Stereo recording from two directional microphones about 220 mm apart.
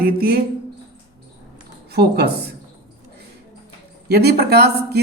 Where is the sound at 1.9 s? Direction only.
50° right (ahead or behind).